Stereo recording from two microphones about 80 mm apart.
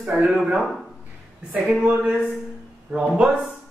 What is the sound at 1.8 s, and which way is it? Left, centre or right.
Speech, centre.